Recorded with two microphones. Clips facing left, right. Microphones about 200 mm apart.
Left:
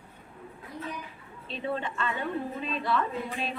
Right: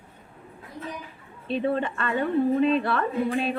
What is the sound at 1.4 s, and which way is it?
A woman's voice, 55° right (ahead or behind).